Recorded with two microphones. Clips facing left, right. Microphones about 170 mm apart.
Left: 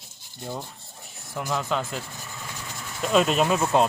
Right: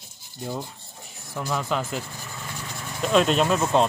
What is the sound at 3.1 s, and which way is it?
Rub, 5° left (ahead or behind).